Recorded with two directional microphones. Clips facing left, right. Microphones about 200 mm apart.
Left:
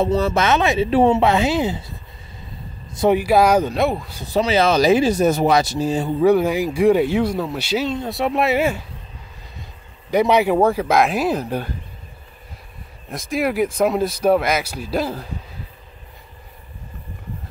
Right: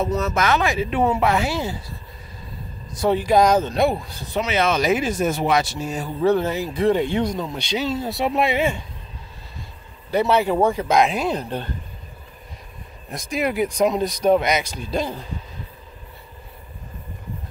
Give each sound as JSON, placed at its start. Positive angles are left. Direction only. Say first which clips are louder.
{"t": 0.0, "sound": "speech", "louder": "left 4 dB", "side_deg": 30}
{"t": 2.9, "sound": "vehicle", "louder": "left 4 dB", "side_deg": 25}
{"t": 3.2, "sound": "speech", "louder": "right 1 dB", "side_deg": 10}
{"t": 4.3, "sound": "speech", "louder": "left 4 dB", "side_deg": 35}
{"t": 6.2, "sound": "speech", "louder": "left 3 dB", "side_deg": 10}
{"t": 10.1, "sound": "speech", "louder": "left 3 dB", "side_deg": 15}
{"t": 13.1, "sound": "speech", "louder": "left 2 dB", "side_deg": 0}